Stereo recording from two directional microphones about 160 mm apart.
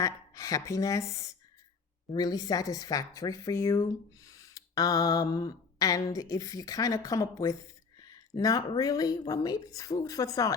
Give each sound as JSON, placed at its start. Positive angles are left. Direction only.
{"t": 0.0, "sound": "a woman's voice", "side_deg": 20}